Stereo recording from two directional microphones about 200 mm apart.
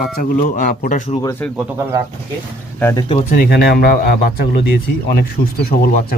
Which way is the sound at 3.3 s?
50° left (ahead or behind).